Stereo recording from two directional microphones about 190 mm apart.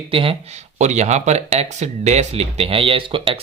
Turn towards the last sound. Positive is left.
turn(degrees=-25)  # may be behind; listen again after turning